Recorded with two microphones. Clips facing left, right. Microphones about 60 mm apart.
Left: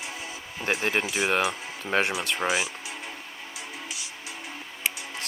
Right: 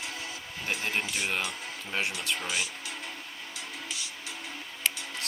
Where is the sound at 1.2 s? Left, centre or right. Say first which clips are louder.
Left 7 dB; left.